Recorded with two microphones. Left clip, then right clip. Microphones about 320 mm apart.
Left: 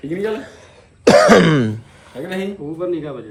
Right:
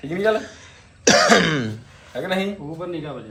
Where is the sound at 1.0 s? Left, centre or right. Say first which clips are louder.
Left 5 dB; centre.